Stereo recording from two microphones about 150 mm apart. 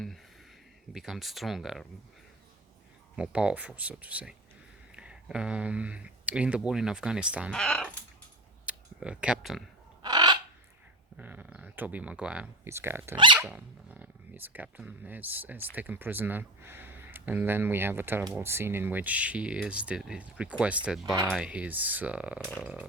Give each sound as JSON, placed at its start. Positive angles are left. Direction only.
{"t": 0.9, "sound": "speech", "side_deg": 0}
{"t": 3.2, "sound": "speech", "side_deg": -5}
{"t": 7.5, "sound": "speech", "side_deg": 5}
{"t": 8.6, "sound": "speech", "side_deg": -5}
{"t": 10.0, "sound": "bird", "side_deg": -25}
{"t": 11.2, "sound": "speech", "side_deg": -10}
{"t": 13.1, "sound": "speech", "side_deg": -30}
{"t": 13.4, "sound": "speech", "side_deg": -10}